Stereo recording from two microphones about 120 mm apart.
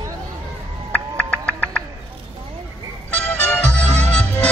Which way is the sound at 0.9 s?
15° left (ahead or behind).